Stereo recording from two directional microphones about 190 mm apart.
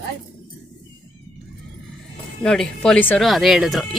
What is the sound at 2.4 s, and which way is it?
Speech, 5° left (ahead or behind).